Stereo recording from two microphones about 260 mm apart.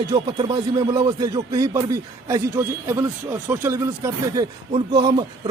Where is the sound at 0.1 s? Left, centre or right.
Centre.